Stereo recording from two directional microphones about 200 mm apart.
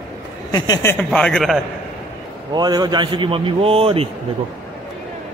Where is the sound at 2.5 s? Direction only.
20° right (ahead or behind).